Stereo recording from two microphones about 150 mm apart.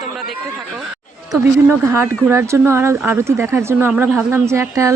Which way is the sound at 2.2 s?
20° right (ahead or behind).